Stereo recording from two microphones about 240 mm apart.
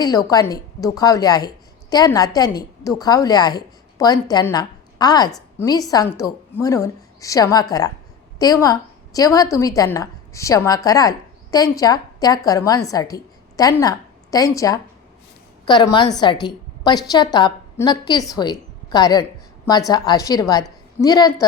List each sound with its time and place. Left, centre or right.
0.0 s a woman's voice: centre